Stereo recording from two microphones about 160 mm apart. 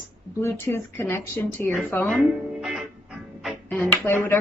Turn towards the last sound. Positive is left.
turn(degrees=15)  # may be behind; listen again after turning